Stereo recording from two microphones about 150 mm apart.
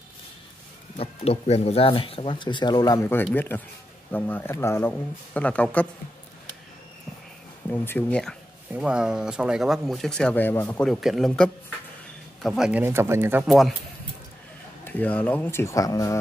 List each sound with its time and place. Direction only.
0.9 s speech: 45° left (ahead or behind); by 3.1 s 25° left (ahead or behind)
3.3 s speech: 15° left (ahead or behind)
7.7 s speech: 15° left (ahead or behind)
8.7 s speech: 5° right (ahead or behind); by 10.8 s 15° left (ahead or behind)
10.8 s speech: centre (ahead or behind)
12.8 s speech: 15° right (ahead or behind)
13.5 s speech: centre (ahead or behind)
14.9 s speech: 10° left (ahead or behind)